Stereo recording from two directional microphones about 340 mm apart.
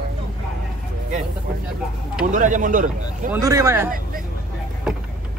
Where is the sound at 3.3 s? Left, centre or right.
Centre.